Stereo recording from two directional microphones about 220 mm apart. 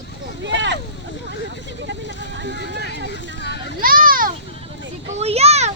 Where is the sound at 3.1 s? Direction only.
50° left (ahead or behind).